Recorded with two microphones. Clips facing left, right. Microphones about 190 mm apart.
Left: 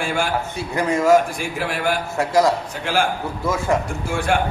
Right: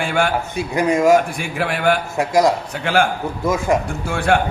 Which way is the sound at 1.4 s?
60° right (ahead or behind).